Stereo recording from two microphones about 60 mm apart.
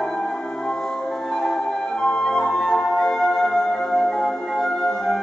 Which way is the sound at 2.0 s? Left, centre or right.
Centre.